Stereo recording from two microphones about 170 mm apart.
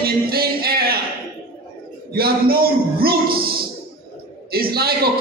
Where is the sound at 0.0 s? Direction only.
65° right (ahead or behind).